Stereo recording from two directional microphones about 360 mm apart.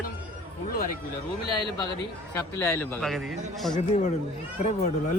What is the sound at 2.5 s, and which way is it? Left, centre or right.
Speech, centre.